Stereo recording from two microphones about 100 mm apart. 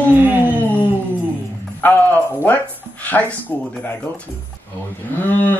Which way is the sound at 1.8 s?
15° left (ahead or behind).